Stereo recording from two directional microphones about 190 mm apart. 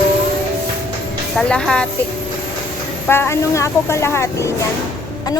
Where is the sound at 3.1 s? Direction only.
15° left (ahead or behind).